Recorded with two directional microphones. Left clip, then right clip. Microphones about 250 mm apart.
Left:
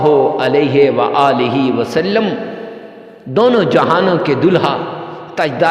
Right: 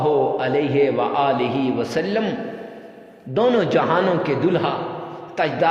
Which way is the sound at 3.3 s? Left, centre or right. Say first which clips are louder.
Left 7 dB; left.